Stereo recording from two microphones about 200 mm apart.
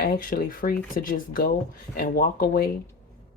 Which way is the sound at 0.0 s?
45° left (ahead or behind).